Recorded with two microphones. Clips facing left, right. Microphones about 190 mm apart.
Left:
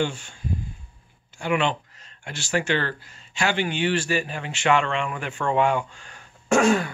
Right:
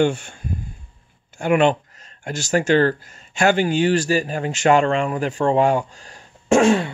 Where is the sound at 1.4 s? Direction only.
45° right (ahead or behind).